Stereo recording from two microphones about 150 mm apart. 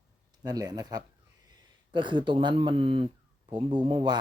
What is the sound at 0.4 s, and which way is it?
Speech, 25° right (ahead or behind).